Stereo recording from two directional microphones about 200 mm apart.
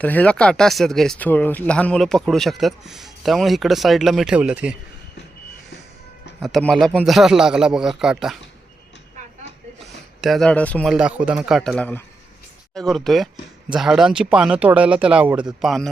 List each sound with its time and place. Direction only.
0.0 s speech: 10° left (ahead or behind)
6.4 s speech: centre (ahead or behind)
9.8 s speech: centre (ahead or behind)
10.9 s speech: 5° right (ahead or behind)